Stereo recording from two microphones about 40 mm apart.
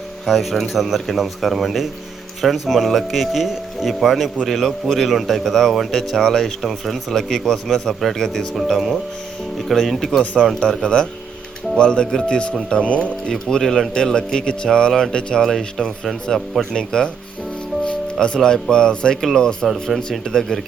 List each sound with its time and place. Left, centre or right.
0.3 s speech: centre
10.8 s speech: left
13.3 s speech: centre
18.3 s speech: centre
19.6 s speech: centre
20.0 s speech: centre